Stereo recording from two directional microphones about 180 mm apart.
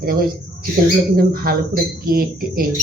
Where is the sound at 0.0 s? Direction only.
55° right (ahead or behind).